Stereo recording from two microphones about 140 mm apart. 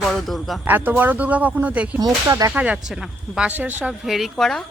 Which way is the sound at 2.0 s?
25° right (ahead or behind).